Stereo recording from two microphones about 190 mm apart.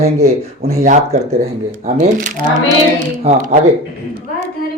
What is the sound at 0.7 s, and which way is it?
Speech, 45° right (ahead or behind).